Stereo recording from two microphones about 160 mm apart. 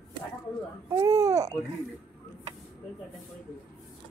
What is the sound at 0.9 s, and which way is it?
Baby cry, 20° right (ahead or behind).